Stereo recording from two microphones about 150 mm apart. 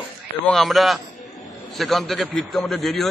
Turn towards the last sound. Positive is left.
turn(degrees=0)  # may be behind; listen again after turning